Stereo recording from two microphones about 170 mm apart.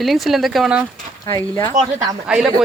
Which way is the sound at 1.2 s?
20° left (ahead or behind).